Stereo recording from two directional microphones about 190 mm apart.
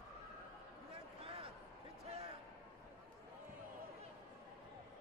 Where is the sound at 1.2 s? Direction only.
30° right (ahead or behind).